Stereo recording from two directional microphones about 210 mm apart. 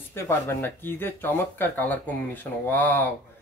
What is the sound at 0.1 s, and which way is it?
Speech, 10° left (ahead or behind).